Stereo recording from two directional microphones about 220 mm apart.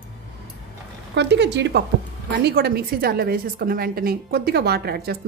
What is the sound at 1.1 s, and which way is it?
A woman's voice, 50° right (ahead or behind).